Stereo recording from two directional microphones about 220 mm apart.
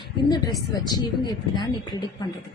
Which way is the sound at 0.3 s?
20° left (ahead or behind).